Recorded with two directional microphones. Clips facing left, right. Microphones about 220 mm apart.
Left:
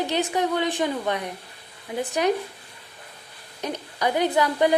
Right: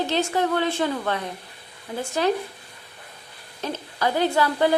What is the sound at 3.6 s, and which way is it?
A woman's voice, 15° left (ahead or behind).